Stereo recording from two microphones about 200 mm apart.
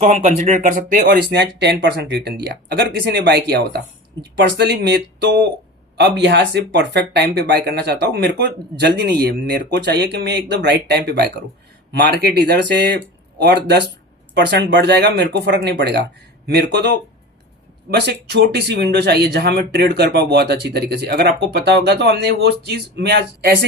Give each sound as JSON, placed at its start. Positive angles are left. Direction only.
{"t": 0.0, "sound": "speech", "side_deg": -40}
{"t": 1.0, "sound": "speech", "side_deg": -55}
{"t": 17.9, "sound": "speech", "side_deg": -55}